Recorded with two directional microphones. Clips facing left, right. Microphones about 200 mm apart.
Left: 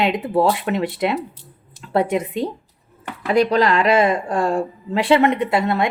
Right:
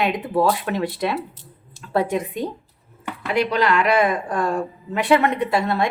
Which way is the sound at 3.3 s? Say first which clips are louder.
Left 4 dB; 35° left (ahead or behind).